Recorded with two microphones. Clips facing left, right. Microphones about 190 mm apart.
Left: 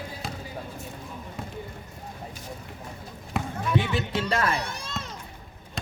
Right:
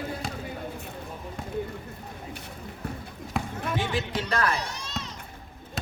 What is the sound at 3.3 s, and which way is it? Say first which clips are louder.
Basketball bounce: left 1 dB; centre (ahead or behind).